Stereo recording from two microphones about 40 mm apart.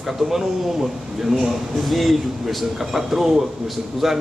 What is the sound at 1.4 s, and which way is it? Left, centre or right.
Speech, centre.